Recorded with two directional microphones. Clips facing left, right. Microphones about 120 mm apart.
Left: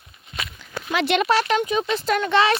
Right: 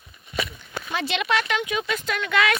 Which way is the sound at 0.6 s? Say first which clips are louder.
Left 5 dB; 90° left.